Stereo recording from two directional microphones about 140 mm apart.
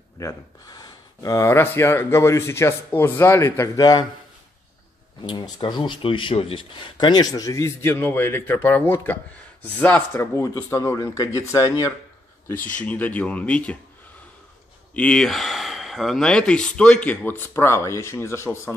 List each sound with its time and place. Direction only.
0.2 s speech: 25° left (ahead or behind)
5.3 s speech: 35° left (ahead or behind)
12.7 s speech: 10° left (ahead or behind)
15.0 s speech: 5° left (ahead or behind)